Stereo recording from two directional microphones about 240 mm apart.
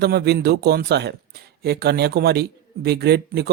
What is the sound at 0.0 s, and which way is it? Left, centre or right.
Speech, right.